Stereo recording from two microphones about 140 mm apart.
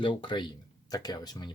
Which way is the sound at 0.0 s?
35° left (ahead or behind).